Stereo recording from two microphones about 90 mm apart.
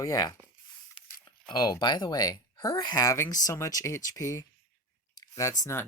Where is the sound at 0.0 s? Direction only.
45° left (ahead or behind).